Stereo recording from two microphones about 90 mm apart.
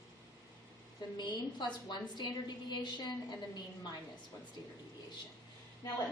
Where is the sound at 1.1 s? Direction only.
55° left (ahead or behind).